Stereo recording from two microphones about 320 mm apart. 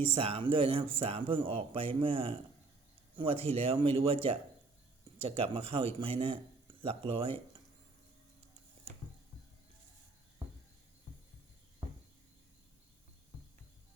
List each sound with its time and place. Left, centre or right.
0.0 s a man's voice: centre